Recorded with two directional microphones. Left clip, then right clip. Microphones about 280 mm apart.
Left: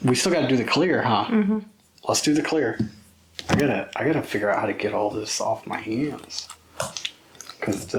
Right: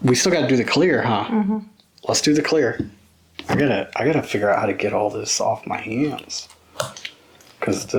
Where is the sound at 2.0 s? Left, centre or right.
Right.